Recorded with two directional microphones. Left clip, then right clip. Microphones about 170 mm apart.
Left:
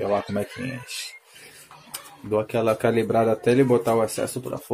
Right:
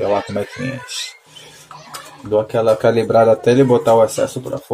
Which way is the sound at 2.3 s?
25° left (ahead or behind).